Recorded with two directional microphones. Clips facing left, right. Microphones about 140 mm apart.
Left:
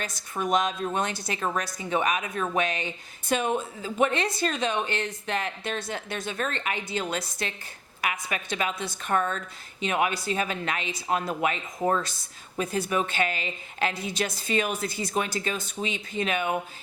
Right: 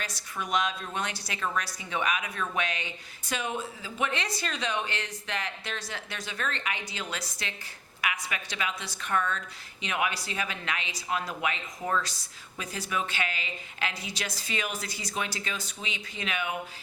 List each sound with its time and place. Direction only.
0.0 s a woman's voice: 50° left (ahead or behind)
1.4 s a woman's voice: 35° left (ahead or behind)
12.1 s a woman's voice: 50° left (ahead or behind)